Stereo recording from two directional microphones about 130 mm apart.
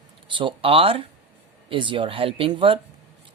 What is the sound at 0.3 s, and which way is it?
Speech, 40° right (ahead or behind).